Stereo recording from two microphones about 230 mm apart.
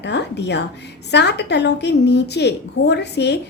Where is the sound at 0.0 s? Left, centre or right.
Left.